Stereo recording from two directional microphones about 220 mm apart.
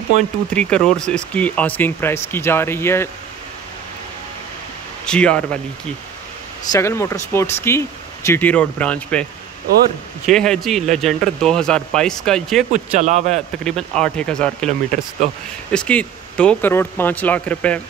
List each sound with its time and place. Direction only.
0.5 s speech: 5° left (ahead or behind)
5.0 s speech: 5° left (ahead or behind)
6.7 s speech: 15° left (ahead or behind)
10.3 s speech: centre (ahead or behind)
12.7 s speech: 30° right (ahead or behind)
13.7 s speech: 5° left (ahead or behind)